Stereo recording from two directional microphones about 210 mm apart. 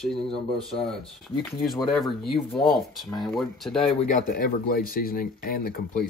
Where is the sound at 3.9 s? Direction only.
40° left (ahead or behind).